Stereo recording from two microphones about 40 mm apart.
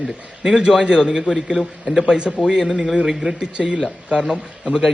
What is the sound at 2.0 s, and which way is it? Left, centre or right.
Speech, right.